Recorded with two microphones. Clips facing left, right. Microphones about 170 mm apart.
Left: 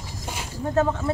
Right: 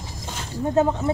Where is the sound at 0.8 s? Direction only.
15° right (ahead or behind).